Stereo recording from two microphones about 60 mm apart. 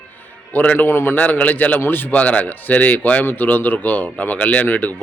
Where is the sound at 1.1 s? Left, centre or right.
Left.